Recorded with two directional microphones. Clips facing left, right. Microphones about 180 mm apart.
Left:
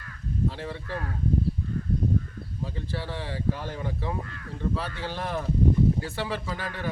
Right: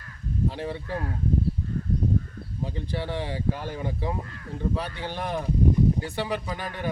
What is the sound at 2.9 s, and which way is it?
Speech, 15° right (ahead or behind).